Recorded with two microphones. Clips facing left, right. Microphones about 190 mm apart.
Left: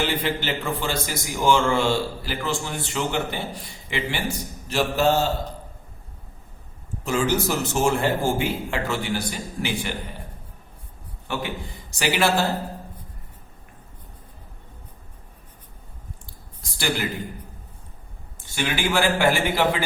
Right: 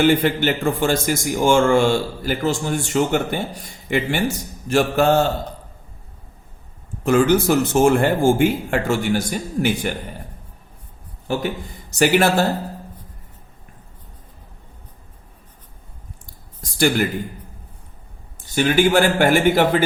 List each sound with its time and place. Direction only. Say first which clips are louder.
0.0 s a man's voice: right 9 dB; 50° right (ahead or behind)
4.7 s mantra: right 5 dB; 50° right (ahead or behind)
7.0 s a man's voice: right 7 dB; 55° right (ahead or behind)
11.3 s a man's voice: right 6 dB; 45° right (ahead or behind)
16.7 s speech: right 8 dB; 45° right (ahead or behind)
18.5 s a man's voice: right 8 dB; 45° right (ahead or behind)